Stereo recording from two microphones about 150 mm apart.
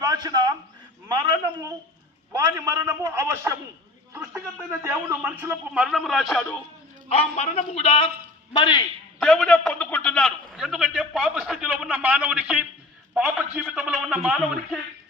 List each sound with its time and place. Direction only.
0.0 s a man's voice: 25° right (ahead or behind)
2.3 s a man's voice: 20° right (ahead or behind); by 6.6 s centre (ahead or behind)
7.1 s a man's voice: 45° left (ahead or behind); by 8.8 s 30° left (ahead or behind)
9.1 s a man's voice: centre (ahead or behind)